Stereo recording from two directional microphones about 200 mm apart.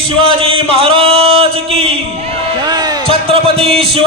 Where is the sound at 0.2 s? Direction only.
25° right (ahead or behind).